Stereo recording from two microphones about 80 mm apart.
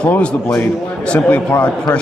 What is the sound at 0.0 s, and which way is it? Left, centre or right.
Speech, centre.